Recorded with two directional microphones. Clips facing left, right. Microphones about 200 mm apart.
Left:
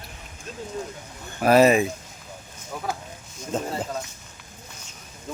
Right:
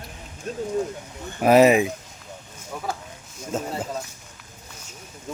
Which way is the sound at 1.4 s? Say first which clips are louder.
Right 1 dB; 15° right (ahead or behind).